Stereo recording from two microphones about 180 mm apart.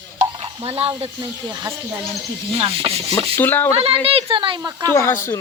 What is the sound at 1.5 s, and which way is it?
Speech, 15° right (ahead or behind).